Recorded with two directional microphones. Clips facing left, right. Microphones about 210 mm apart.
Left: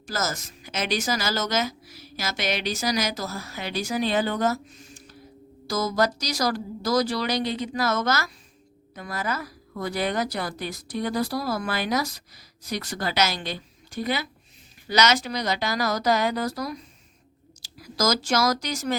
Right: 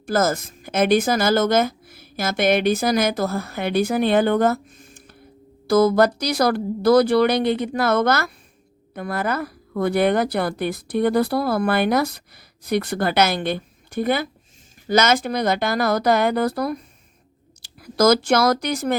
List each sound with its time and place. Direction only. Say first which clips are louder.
0.0 s a woman's voice: right 10 dB; 55° right (ahead or behind)